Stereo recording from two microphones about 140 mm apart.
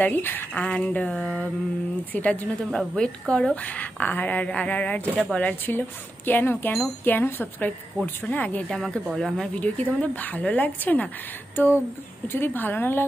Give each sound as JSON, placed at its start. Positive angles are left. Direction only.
{"t": 0.0, "sound": "a woman's voice", "side_deg": 15}
{"t": 12.3, "sound": "a woman's voice", "side_deg": 15}